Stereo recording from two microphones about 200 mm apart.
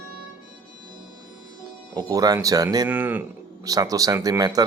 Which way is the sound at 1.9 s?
20° right (ahead or behind).